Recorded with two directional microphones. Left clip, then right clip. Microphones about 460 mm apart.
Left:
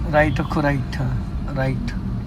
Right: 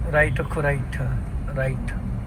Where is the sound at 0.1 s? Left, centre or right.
Centre.